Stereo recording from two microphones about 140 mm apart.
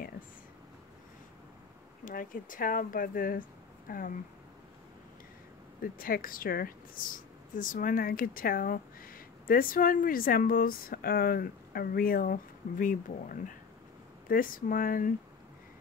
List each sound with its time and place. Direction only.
2.0 s speech: 80° left
5.8 s speech: 90° left